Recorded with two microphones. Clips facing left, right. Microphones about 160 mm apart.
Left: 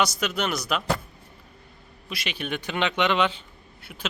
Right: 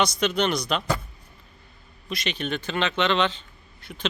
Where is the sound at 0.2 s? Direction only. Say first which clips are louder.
Right 4 dB; 5° left (ahead or behind).